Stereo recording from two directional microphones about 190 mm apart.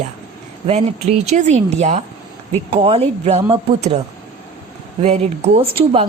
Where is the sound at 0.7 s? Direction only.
35° right (ahead or behind).